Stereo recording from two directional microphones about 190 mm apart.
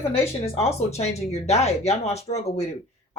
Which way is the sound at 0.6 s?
35° left (ahead or behind).